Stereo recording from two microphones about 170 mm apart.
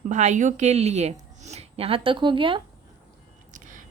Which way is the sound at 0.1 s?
45° right (ahead or behind).